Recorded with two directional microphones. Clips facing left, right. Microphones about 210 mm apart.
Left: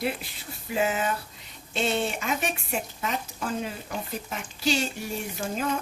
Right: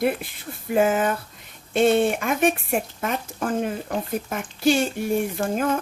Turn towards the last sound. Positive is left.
turn(degrees=-55)  # may be behind; listen again after turning